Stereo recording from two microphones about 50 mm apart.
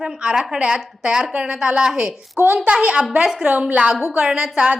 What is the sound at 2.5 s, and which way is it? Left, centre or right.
Speech, right.